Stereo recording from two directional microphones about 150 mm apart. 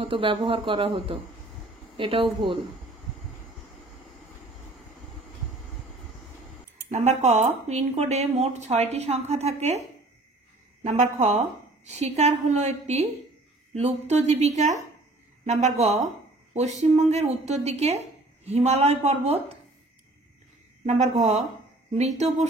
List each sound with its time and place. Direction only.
0.0 s speech: 35° right (ahead or behind)
6.9 s a woman's voice: 50° right (ahead or behind)
20.8 s a woman's voice: 50° right (ahead or behind)